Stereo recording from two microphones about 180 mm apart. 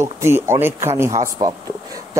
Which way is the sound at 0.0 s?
15° right (ahead or behind).